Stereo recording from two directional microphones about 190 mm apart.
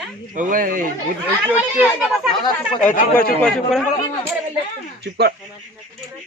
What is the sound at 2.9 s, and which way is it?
Speech, 50° left (ahead or behind).